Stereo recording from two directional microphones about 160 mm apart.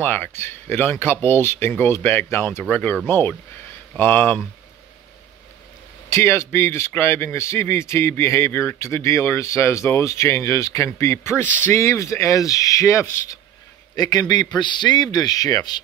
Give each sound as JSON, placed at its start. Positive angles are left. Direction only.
{"t": 0.0, "sound": "a man's voice", "side_deg": 10}
{"t": 6.0, "sound": "a man's voice", "side_deg": 15}